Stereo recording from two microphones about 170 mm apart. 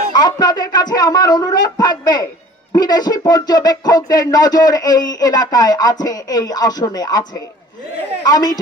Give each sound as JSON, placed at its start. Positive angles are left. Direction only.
{"t": 0.1, "sound": "speech", "side_deg": 25}